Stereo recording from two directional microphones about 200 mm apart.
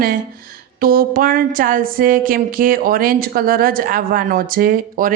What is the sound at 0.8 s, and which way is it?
A woman's voice, 45° right (ahead or behind).